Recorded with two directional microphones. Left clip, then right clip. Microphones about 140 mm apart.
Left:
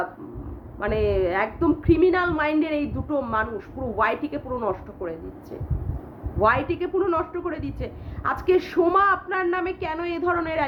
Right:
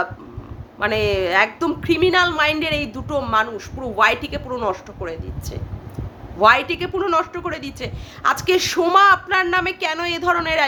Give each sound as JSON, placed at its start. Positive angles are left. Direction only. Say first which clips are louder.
{"t": 0.8, "sound": "a woman's voice", "louder": "right 4 dB", "side_deg": -25}